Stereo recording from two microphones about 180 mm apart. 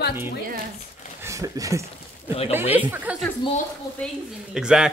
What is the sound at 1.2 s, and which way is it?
Speech, 15° right (ahead or behind).